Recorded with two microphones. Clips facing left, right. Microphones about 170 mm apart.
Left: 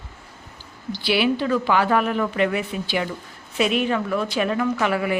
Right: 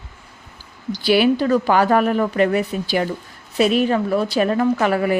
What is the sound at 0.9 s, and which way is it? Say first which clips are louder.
A woman's voice: right 5 dB; 45° right (ahead or behind).